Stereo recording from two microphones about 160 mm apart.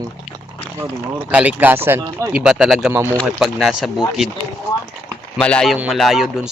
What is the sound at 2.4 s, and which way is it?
Speech, 5° right (ahead or behind).